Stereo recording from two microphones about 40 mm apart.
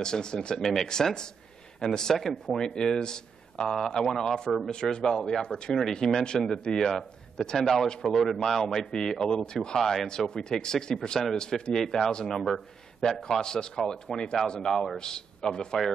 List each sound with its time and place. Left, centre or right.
0.0 s a man's voice: centre
2.1 s speech: centre
4.9 s a man's voice: centre
6.9 s a man's voice: centre
9.8 s speech: centre
10.0 s a man's voice: centre
15.0 s a man's voice: centre